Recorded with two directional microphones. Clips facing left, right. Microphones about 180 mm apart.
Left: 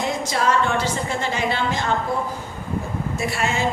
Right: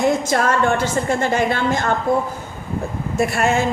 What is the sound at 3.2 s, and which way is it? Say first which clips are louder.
Speech: right 8 dB; 50° right (ahead or behind).